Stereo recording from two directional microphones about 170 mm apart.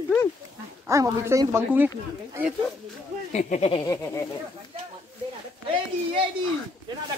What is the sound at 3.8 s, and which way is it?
Speech, 15° left (ahead or behind).